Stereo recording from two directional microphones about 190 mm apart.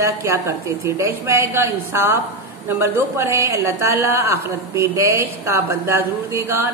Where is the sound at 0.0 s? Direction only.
15° right (ahead or behind).